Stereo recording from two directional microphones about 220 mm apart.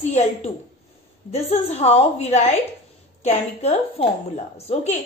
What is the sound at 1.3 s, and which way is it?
A woman's voice, 30° left (ahead or behind).